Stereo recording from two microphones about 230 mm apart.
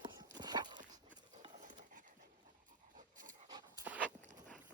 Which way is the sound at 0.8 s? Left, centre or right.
Right.